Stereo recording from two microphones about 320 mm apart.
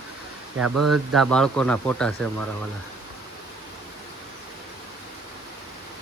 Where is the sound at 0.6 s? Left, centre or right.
Right.